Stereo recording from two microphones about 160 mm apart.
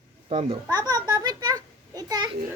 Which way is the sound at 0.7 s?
25° right (ahead or behind).